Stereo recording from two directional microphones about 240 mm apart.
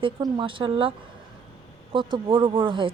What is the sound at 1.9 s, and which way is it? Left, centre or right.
Speech, right.